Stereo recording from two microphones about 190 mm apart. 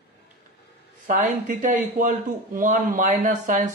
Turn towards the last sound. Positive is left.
turn(degrees=-40)  # may be behind; listen again after turning